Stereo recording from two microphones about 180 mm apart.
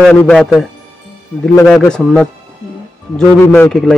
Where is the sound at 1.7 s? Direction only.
Centre (ahead or behind).